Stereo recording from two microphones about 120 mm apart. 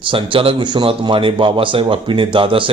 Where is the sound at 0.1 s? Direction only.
45° right (ahead or behind).